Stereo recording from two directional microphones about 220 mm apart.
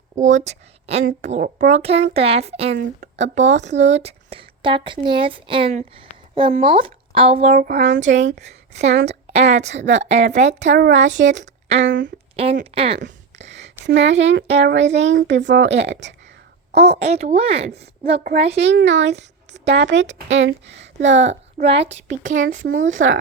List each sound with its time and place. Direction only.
0.2 s a woman's voice: 35° right (ahead or behind)
7.8 s speech: 55° right (ahead or behind)
8.4 s a woman's voice: 30° right (ahead or behind)
10.7 s a woman's voice: 45° right (ahead or behind)
10.9 s a woman's voice: 35° right (ahead or behind)
11.9 s speech: 55° right (ahead or behind)
12.4 s speech: 25° right (ahead or behind)
13.8 s a woman's voice: 55° right (ahead or behind)
16.7 s speech: 30° right (ahead or behind)
18.6 s a woman's voice: 55° right (ahead or behind)
21.2 s a woman's voice: 30° right (ahead or behind)
22.8 s speech: 60° right (ahead or behind)